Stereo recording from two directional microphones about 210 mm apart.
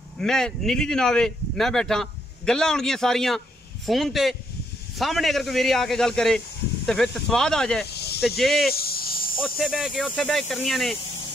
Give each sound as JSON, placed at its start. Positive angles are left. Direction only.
{"t": 0.2, "sound": "speech", "side_deg": 0}
{"t": 7.8, "sound": "snake", "side_deg": 50}
{"t": 8.4, "sound": "speech", "side_deg": 0}
{"t": 8.7, "sound": "snake", "side_deg": 45}
{"t": 9.4, "sound": "speech", "side_deg": 0}